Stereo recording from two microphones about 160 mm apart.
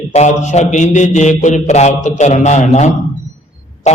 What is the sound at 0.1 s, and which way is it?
A man's voice, 45° left (ahead or behind).